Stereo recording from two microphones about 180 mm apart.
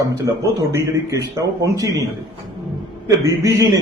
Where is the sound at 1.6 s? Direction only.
20° right (ahead or behind).